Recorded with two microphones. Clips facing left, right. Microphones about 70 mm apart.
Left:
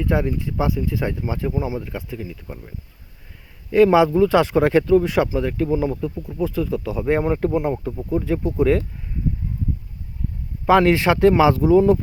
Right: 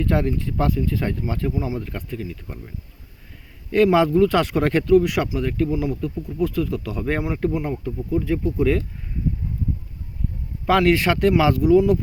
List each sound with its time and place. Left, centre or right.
0.0 s speech: centre
1.8 s speech: centre
3.9 s speech: centre
6.9 s speech: centre
7.2 s speech: left
10.7 s speech: left